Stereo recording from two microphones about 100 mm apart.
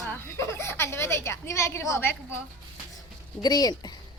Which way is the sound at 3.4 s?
40° left (ahead or behind).